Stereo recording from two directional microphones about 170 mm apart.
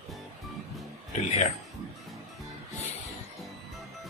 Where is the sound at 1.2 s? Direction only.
40° left (ahead or behind).